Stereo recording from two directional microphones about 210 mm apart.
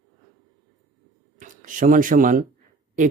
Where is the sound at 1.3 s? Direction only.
40° right (ahead or behind).